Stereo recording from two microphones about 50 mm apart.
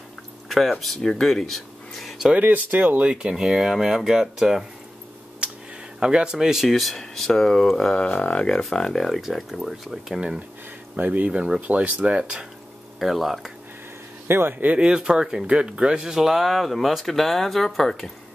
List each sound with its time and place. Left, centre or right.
0.5 s speech: centre
2.4 s speech: right
3.0 s speech: right
3.4 s speech: centre
5.9 s speech: centre
7.0 s speech: centre
8.7 s speech: centre
9.2 s speech: centre
11.0 s speech: right
11.3 s speech: centre
11.6 s speech: right
12.2 s speech: centre
14.2 s speech: right
14.8 s speech: centre